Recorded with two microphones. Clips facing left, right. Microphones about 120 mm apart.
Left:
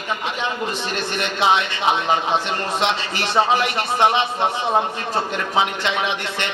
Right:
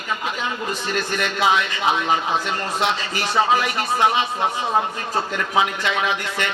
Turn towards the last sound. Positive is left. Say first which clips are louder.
# right 1 dB
turn(degrees=25)  # may be behind; listen again after turning